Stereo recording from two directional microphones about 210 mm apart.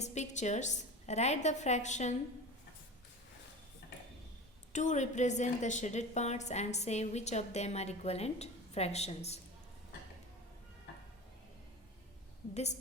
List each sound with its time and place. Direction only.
0.0 s a woman's voice: 35° left (ahead or behind)
4.7 s a woman's voice: 35° left (ahead or behind)